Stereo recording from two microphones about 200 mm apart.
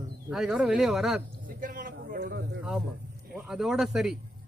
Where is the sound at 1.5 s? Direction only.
45° right (ahead or behind).